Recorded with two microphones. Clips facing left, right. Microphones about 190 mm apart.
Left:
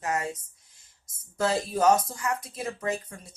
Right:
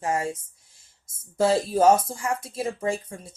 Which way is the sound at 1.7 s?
25° right (ahead or behind).